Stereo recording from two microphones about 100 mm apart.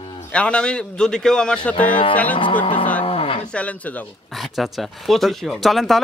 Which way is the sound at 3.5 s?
15° left (ahead or behind).